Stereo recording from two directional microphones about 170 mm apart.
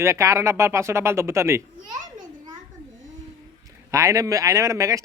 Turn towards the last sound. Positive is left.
turn(degrees=-20)  # may be behind; listen again after turning